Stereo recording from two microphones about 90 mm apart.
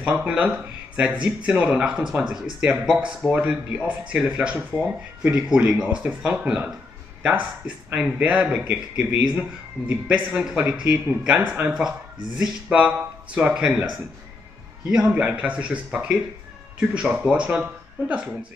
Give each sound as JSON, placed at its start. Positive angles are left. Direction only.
{"t": 0.0, "sound": "speech", "side_deg": -10}
{"t": 14.9, "sound": "speech", "side_deg": -10}